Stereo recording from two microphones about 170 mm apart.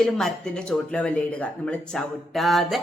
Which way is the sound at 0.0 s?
5° left (ahead or behind).